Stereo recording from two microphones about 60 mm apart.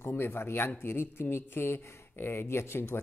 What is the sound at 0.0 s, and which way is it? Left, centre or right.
Speech, left.